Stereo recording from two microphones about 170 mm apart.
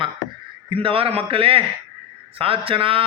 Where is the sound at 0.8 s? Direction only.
30° right (ahead or behind).